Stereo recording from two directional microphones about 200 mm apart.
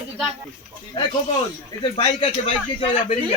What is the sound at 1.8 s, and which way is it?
A man's voice, 25° left (ahead or behind).